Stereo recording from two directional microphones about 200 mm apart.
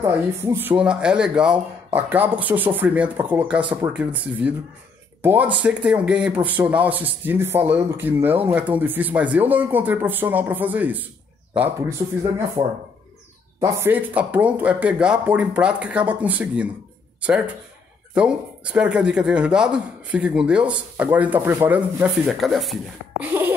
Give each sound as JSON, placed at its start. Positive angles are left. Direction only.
{"t": 0.0, "sound": "speech", "side_deg": -10}
{"t": 12.6, "sound": "speech", "side_deg": -15}
{"t": 18.1, "sound": "speech", "side_deg": -5}
{"t": 23.2, "sound": "a sound", "side_deg": -10}